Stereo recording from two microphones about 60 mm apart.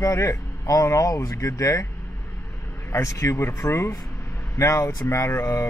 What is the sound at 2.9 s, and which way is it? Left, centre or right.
Speech, left.